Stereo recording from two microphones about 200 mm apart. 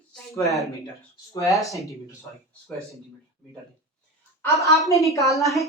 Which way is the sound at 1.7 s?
15° left (ahead or behind).